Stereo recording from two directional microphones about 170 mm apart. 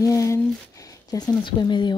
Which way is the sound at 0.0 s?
20° left (ahead or behind).